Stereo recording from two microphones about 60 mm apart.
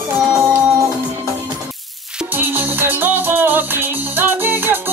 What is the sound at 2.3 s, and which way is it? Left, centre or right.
Music, right.